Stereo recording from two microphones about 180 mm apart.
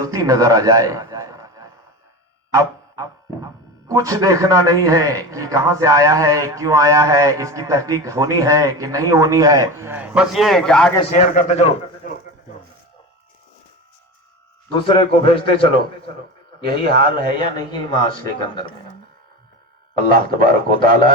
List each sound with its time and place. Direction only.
0.0 s a man's voice: 20° right (ahead or behind)
2.5 s a sound: 20° right (ahead or behind)
3.8 s a man's voice: 20° right (ahead or behind); by 10.9 s 5° left (ahead or behind)
11.1 s a man's voice: 45° left (ahead or behind)
14.8 s a man's voice: 30° left (ahead or behind)
16.8 s speech: 55° right (ahead or behind)
17.3 s speech: 25° left (ahead or behind)
20.0 s a man's voice: 50° right (ahead or behind)